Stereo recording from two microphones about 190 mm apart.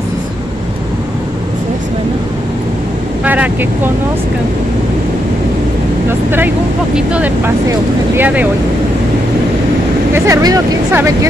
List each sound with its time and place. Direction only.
3.3 s speech: 10° right (ahead or behind)
7.0 s speech: 5° right (ahead or behind)
10.1 s speech: 15° right (ahead or behind)